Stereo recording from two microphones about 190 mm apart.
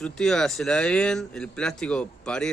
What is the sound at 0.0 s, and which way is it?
Speech, 5° left (ahead or behind).